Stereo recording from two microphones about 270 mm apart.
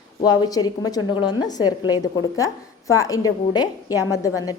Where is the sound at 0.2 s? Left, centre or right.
Centre.